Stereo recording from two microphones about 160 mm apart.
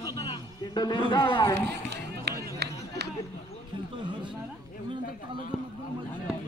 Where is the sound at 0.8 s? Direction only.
30° left (ahead or behind).